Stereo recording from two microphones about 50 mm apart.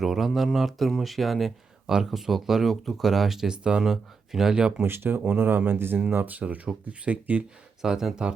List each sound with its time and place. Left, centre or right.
0.0 s speech: centre
3.8 s speech: centre
4.9 s speech: right
5.2 s speech: right
5.5 s speech: right
7.8 s speech: centre